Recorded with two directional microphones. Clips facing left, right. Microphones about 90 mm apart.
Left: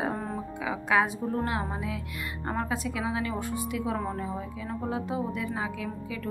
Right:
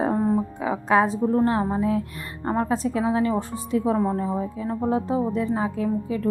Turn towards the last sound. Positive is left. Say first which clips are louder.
# right 10 dB
turn(degrees=-35)  # may be behind; listen again after turning